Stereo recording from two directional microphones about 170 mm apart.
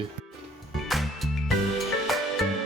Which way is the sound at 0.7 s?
Centre (ahead or behind).